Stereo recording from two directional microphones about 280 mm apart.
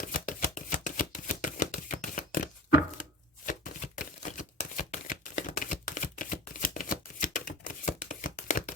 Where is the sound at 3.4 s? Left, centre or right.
Left.